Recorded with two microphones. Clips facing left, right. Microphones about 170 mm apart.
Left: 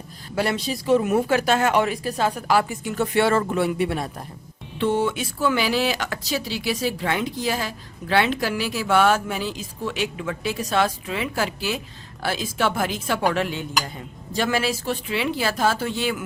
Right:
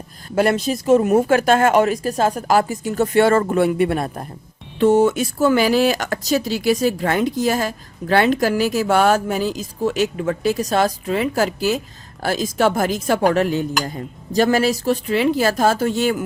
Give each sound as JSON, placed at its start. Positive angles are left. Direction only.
{"t": 0.3, "sound": "speech", "side_deg": -50}
{"t": 4.8, "sound": "speech", "side_deg": -45}